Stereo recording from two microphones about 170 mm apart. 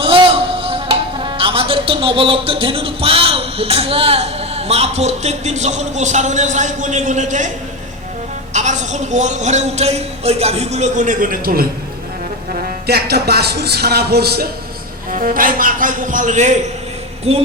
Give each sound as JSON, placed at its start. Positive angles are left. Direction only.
{"t": 0.0, "sound": "music", "side_deg": -30}
{"t": 8.5, "sound": "a woman's voice", "side_deg": -45}
{"t": 12.9, "sound": "speech", "side_deg": -70}
{"t": 15.1, "sound": "a woman's voice", "side_deg": -55}
{"t": 17.3, "sound": "music", "side_deg": -40}